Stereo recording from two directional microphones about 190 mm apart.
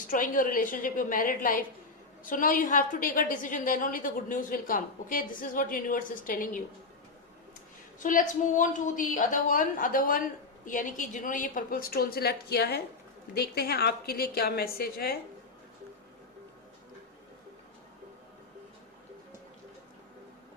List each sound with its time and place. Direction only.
0.0 s a woman's voice: 45° left (ahead or behind)
7.9 s a woman's voice: 45° left (ahead or behind)